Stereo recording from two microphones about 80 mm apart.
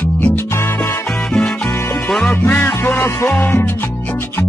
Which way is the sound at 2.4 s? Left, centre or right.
Left.